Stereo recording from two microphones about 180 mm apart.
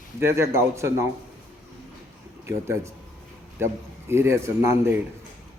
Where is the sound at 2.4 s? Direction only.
15° right (ahead or behind).